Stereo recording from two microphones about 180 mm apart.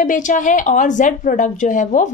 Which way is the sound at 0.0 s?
45° left (ahead or behind).